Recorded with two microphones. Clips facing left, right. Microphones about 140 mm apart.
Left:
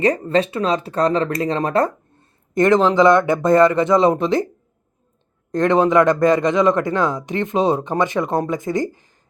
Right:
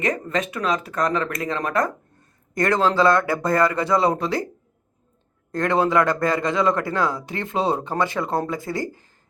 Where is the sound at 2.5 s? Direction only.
20° left (ahead or behind).